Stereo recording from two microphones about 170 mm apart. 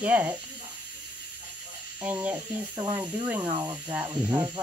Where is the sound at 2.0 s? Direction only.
10° right (ahead or behind).